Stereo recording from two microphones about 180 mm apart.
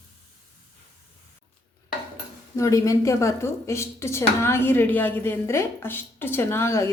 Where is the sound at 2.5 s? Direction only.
15° left (ahead or behind).